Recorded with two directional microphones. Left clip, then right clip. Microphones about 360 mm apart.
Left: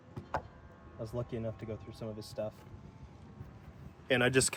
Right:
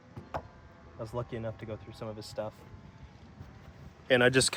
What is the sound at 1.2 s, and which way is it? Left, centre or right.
Speech, centre.